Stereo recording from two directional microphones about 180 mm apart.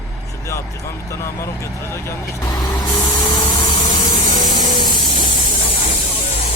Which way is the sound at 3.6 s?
30° left (ahead or behind).